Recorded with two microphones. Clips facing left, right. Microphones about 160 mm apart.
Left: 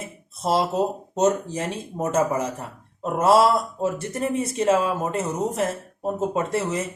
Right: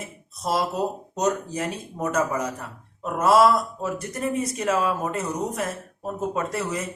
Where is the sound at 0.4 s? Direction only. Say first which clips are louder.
Left 3 dB; 25° left (ahead or behind).